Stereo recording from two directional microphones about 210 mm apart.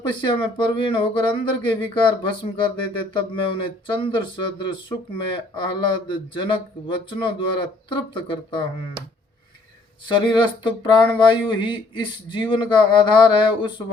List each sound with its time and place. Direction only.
0.1 s speech: 25° left (ahead or behind)
10.2 s speech: 20° left (ahead or behind)